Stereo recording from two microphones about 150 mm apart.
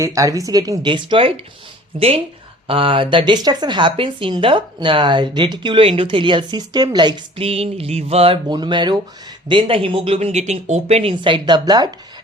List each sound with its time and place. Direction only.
0.0 s speech: 20° right (ahead or behind)